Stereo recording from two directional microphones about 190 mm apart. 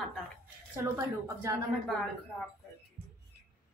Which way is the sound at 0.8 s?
15° right (ahead or behind).